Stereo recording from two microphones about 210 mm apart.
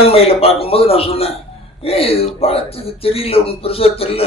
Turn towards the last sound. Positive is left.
turn(degrees=30)  # may be behind; listen again after turning